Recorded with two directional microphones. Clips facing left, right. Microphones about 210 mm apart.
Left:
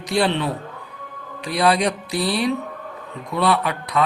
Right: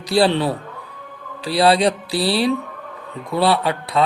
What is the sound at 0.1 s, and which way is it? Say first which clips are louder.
A man's voice: right 4 dB; 35° right (ahead or behind).